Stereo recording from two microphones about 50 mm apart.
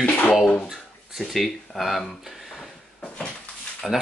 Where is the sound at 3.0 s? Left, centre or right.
Left.